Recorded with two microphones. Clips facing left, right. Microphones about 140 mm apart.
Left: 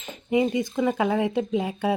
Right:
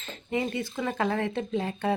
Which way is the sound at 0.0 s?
15° left (ahead or behind).